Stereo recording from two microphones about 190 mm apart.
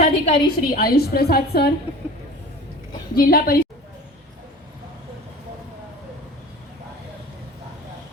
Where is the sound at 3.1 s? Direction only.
50° left (ahead or behind).